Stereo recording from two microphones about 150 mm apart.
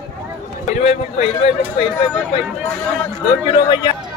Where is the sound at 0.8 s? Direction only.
50° left (ahead or behind).